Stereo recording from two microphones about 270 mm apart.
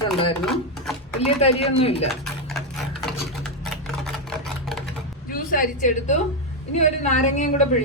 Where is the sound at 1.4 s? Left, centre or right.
Left.